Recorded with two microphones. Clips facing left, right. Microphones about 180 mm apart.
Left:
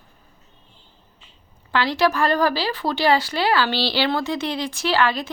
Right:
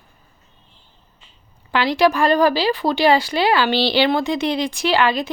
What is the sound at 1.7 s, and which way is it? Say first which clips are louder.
Speech: right 3 dB; 15° right (ahead or behind).